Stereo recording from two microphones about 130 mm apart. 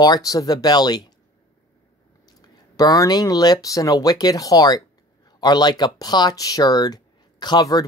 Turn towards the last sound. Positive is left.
turn(degrees=30)  # may be behind; listen again after turning